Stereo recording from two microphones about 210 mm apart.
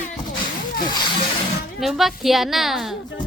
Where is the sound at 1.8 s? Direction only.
Centre (ahead or behind).